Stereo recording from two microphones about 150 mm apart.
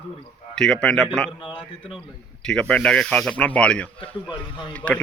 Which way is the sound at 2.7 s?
5° left (ahead or behind).